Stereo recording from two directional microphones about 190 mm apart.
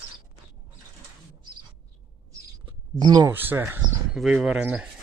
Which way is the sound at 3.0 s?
20° right (ahead or behind).